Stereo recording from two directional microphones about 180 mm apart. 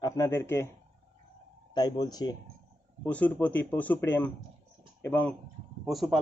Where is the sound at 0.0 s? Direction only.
20° left (ahead or behind).